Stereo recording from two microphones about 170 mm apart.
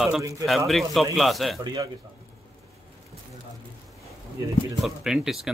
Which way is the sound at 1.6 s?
25° right (ahead or behind).